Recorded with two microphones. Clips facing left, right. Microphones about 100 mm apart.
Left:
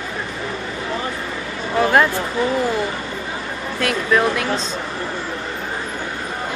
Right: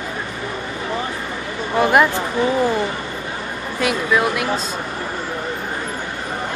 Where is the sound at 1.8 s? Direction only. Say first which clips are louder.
Right 1 dB; 15° right (ahead or behind).